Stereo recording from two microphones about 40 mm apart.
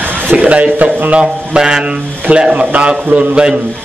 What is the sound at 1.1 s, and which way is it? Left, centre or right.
Speech, right.